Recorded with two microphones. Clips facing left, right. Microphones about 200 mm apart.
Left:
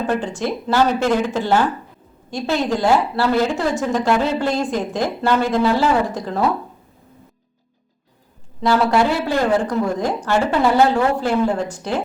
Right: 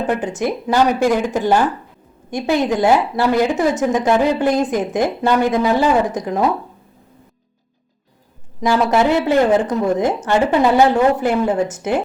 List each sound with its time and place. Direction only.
0.2 s a woman's voice: 20° right (ahead or behind)
8.6 s a woman's voice: 20° right (ahead or behind)